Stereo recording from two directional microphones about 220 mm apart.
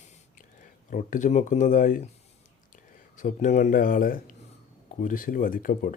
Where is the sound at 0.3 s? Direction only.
35° left (ahead or behind).